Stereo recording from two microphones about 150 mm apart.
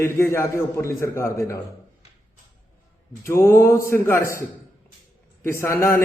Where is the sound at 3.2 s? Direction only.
15° left (ahead or behind).